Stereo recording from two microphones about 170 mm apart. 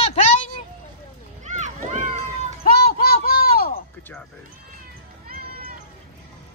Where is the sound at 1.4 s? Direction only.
45° right (ahead or behind).